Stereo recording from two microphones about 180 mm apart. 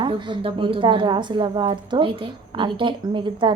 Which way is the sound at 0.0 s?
30° right (ahead or behind).